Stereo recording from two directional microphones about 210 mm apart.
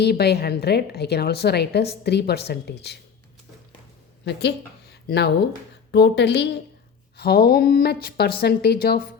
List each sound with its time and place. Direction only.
0.0 s a woman's voice: 50° left (ahead or behind)
4.3 s a woman's voice: 50° left (ahead or behind)